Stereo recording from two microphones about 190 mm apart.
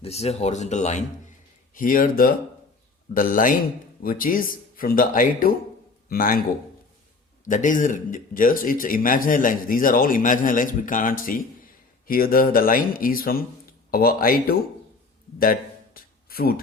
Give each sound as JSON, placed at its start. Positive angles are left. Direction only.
{"t": 0.0, "sound": "speech", "side_deg": 35}
{"t": 7.4, "sound": "speech", "side_deg": 40}
{"t": 16.0, "sound": "a sound", "side_deg": 50}